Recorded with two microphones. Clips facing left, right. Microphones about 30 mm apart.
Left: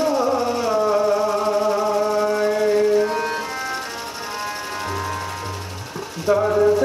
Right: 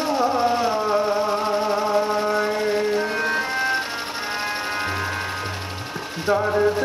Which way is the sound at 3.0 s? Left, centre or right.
Right.